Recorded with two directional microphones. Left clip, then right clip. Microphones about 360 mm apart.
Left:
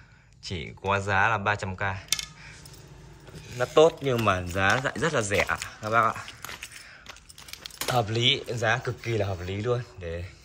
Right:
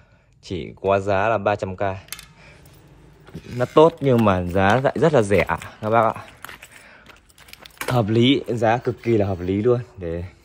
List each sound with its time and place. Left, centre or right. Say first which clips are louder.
0.4 s speech: right 7 dB; centre
3.5 s speech: right 5 dB; centre
7.1 s a sound: left 1 dB; centre
7.9 s speech: right 5 dB; centre